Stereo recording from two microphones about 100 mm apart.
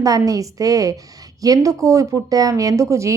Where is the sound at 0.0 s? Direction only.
35° right (ahead or behind).